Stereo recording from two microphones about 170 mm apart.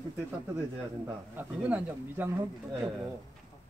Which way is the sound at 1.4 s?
10° right (ahead or behind).